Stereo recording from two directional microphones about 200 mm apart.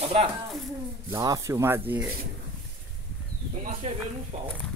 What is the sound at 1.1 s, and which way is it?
Speech, 15° right (ahead or behind).